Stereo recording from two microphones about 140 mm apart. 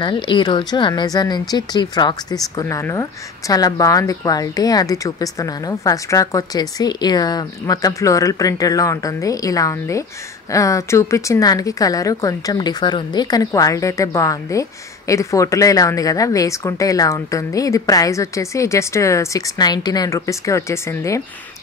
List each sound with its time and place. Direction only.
0.0 s speech: 35° left (ahead or behind)
2.5 s a woman's voice: 20° left (ahead or behind)